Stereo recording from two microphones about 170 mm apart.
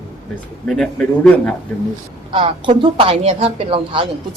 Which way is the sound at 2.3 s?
30° right (ahead or behind).